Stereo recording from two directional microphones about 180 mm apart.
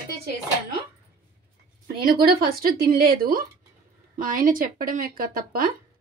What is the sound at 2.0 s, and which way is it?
Speech, 55° right (ahead or behind).